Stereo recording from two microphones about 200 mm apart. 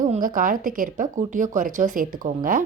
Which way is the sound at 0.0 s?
40° right (ahead or behind).